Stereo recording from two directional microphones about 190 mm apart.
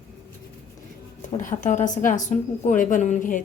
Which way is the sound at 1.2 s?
40° left (ahead or behind).